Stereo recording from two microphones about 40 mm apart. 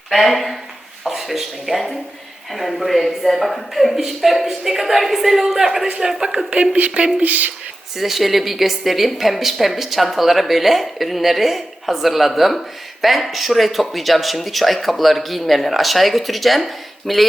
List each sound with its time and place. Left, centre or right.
0.1 s a woman's voice: centre
6.5 s a woman's voice: right
7.9 s a woman's voice: centre